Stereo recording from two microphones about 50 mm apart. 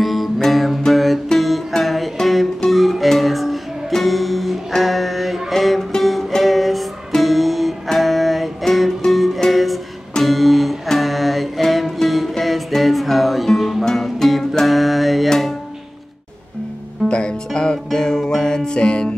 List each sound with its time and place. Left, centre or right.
0.0 s music: centre
17.1 s music: centre